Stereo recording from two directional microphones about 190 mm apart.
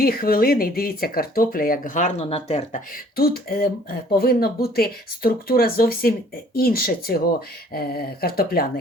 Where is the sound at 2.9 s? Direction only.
55° left (ahead or behind).